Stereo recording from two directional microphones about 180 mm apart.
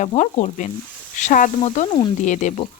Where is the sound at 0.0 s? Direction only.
40° left (ahead or behind).